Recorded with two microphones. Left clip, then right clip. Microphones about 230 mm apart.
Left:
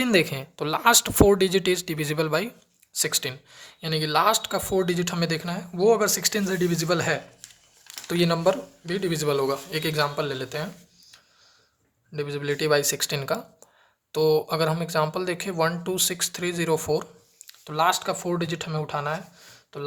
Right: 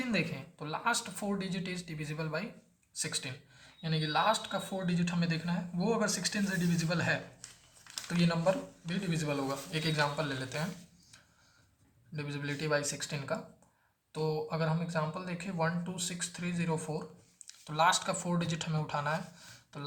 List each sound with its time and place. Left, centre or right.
0.0 s speech: left
8.2 s speech: left
12.1 s speech: left